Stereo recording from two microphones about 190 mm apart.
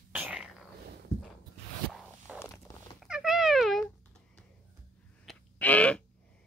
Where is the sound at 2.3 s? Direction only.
5° right (ahead or behind).